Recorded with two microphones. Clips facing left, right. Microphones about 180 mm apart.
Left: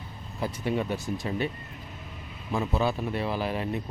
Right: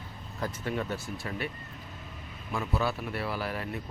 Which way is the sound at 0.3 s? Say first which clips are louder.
Left 4 dB; 15° left (ahead or behind).